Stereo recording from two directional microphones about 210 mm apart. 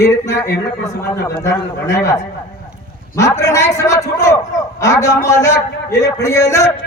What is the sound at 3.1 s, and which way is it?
A man's voice, 15° left (ahead or behind).